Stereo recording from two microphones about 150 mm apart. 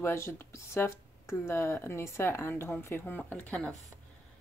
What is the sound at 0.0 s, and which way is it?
Speech, 15° left (ahead or behind).